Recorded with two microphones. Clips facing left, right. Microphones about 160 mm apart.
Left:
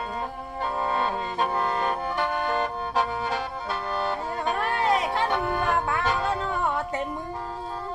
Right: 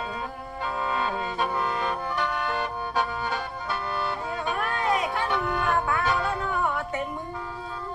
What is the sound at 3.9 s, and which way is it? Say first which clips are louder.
Music: left 2 dB; 40° left (ahead or behind).